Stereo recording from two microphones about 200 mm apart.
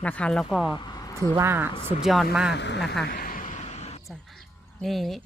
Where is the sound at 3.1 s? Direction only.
45° left (ahead or behind).